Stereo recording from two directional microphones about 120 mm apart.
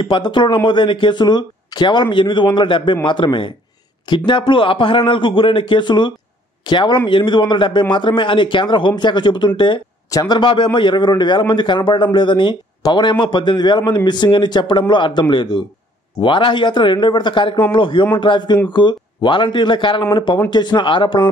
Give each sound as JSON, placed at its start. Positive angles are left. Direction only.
{"t": 0.0, "sound": "a man's voice", "side_deg": 40}